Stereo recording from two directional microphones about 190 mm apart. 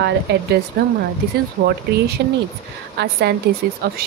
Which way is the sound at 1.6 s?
55° right (ahead or behind).